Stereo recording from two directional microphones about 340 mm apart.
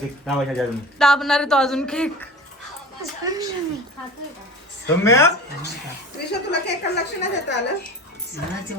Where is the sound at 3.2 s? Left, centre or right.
Centre.